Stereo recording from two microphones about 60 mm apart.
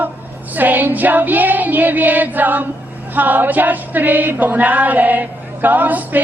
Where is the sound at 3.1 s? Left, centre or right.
Right.